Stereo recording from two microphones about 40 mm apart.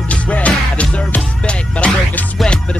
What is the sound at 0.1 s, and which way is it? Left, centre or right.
Music, left.